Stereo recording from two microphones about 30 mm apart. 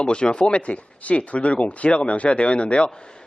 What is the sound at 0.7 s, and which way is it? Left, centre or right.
Speech, left.